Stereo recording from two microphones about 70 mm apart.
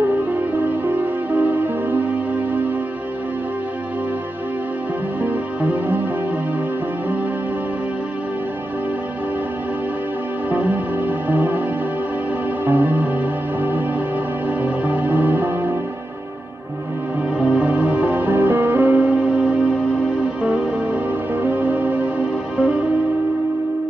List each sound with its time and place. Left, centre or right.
0.8 s music: right
5.2 s music: right
10.5 s music: right
12.6 s music: right
17.4 s music: centre
17.6 s music: right